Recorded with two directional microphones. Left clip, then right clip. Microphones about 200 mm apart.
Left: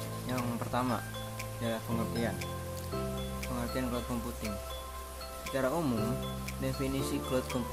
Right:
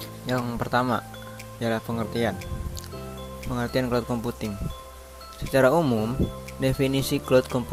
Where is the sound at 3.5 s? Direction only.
35° right (ahead or behind).